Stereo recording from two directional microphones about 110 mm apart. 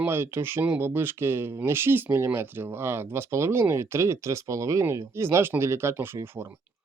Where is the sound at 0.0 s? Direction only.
20° right (ahead or behind).